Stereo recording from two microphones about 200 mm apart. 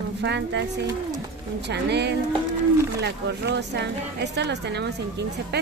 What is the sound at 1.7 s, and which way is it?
A woman's voice, 55° right (ahead or behind).